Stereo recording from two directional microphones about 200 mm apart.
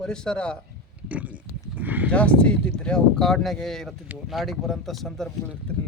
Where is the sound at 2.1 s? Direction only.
5° left (ahead or behind).